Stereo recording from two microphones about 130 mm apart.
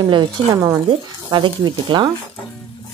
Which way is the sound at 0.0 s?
35° right (ahead or behind).